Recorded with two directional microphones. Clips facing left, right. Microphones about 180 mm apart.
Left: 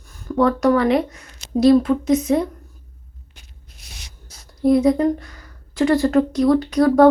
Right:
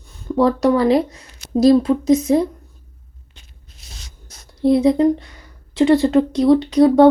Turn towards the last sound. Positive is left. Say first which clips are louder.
# right 2 dB
turn(degrees=-25)  # may be behind; listen again after turning